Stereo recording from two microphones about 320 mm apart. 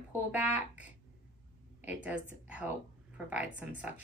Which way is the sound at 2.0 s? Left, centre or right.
Centre.